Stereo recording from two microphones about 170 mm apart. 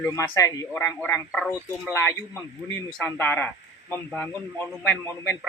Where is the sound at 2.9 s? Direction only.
10° left (ahead or behind).